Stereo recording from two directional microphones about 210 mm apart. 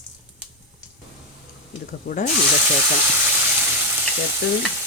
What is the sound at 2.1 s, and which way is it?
Snake, 45° left (ahead or behind).